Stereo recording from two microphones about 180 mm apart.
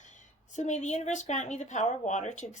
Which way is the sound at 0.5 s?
40° left (ahead or behind).